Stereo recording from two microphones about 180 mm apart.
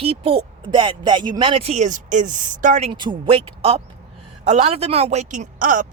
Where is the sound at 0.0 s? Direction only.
30° right (ahead or behind).